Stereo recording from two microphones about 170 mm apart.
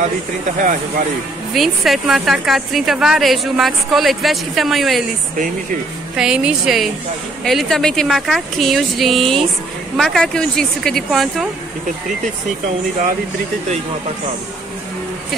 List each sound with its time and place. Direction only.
0.6 s speech: 50° right (ahead or behind)
1.5 s a woman's voice: centre (ahead or behind)
6.1 s a woman's voice: 5° right (ahead or behind)